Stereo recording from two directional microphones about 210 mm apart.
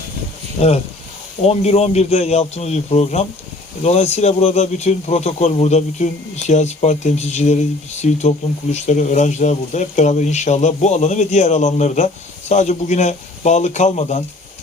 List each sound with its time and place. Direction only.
1.4 s speech: 30° left (ahead or behind)